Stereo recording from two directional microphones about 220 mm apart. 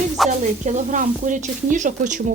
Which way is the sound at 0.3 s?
35° right (ahead or behind).